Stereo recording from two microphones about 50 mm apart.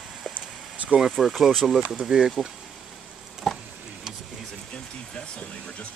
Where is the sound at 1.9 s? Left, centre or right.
Centre.